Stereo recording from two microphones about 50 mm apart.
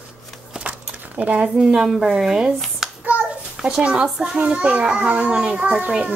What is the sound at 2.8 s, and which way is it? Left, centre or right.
Child singing, centre.